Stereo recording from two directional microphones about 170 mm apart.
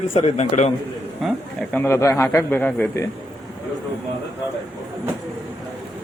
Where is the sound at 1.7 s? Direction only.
15° left (ahead or behind).